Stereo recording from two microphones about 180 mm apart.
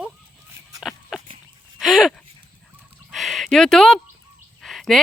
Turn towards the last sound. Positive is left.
turn(degrees=0)  # may be behind; listen again after turning